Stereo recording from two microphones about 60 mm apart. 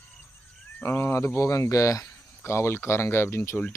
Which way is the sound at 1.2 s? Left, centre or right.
Left.